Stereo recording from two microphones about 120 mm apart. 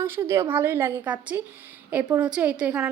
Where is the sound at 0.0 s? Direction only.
20° right (ahead or behind).